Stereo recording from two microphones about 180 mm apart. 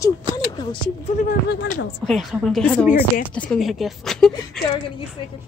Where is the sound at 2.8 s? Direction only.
10° right (ahead or behind).